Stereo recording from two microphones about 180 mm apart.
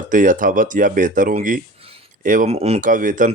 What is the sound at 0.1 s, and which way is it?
Speech, 45° right (ahead or behind).